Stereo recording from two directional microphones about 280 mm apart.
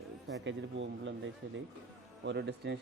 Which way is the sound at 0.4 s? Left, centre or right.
Right.